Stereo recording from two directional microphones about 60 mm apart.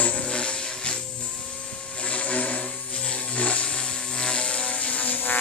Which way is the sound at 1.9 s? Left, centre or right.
Left.